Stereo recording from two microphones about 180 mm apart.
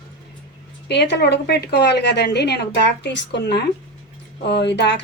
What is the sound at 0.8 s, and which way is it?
A woman's voice, 70° left (ahead or behind).